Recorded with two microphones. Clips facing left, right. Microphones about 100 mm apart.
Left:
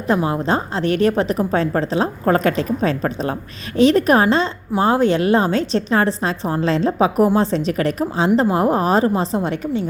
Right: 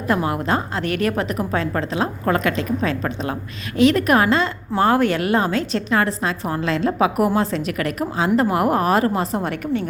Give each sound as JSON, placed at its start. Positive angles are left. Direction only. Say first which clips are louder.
{"t": 0.1, "sound": "a woman's voice", "louder": "left 2 dB", "side_deg": 25}